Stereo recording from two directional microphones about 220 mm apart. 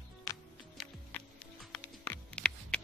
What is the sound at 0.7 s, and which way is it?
Music, 5° left (ahead or behind).